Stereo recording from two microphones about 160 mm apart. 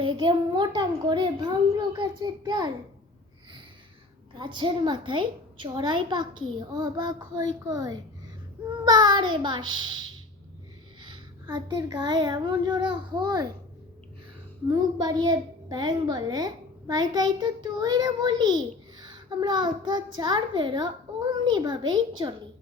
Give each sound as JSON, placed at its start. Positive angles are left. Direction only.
{"t": 0.0, "sound": "a child's voice", "side_deg": -35}
{"t": 4.4, "sound": "a child's voice", "side_deg": -30}
{"t": 14.7, "sound": "a child's voice", "side_deg": -25}